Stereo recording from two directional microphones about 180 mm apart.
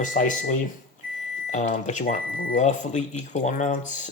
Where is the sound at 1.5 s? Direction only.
40° left (ahead or behind).